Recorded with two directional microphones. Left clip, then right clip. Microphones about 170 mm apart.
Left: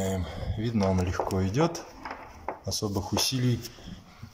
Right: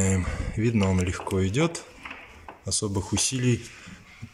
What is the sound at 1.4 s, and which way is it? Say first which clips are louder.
Speech: right 4 dB; 45° left (ahead or behind).